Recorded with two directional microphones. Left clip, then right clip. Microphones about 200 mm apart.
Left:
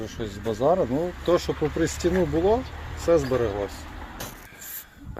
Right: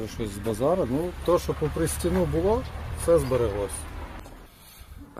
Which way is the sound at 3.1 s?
Centre (ahead or behind).